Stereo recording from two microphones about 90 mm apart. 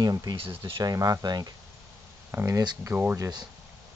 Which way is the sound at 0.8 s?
40° right (ahead or behind).